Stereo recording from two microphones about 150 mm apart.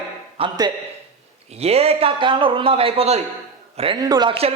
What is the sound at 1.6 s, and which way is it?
A man's voice, 40° right (ahead or behind).